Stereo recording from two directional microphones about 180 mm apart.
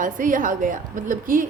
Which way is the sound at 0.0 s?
45° right (ahead or behind).